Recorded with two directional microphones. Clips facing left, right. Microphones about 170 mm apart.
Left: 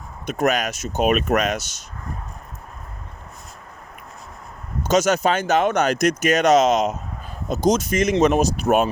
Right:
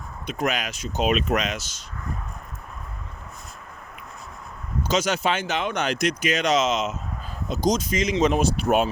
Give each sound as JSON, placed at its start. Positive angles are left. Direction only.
{"t": 0.3, "sound": "speech", "side_deg": 45}
{"t": 4.9, "sound": "speech", "side_deg": 45}
{"t": 7.4, "sound": "speech", "side_deg": 50}
{"t": 8.4, "sound": "speech", "side_deg": 40}